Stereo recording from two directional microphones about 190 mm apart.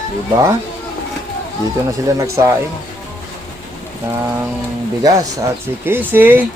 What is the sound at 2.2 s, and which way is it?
Speech, 15° right (ahead or behind).